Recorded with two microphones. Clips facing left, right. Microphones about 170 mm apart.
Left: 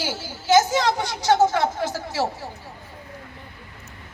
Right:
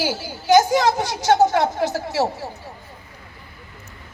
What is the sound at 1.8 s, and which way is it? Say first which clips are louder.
Speech: right 4 dB; 25° right (ahead or behind).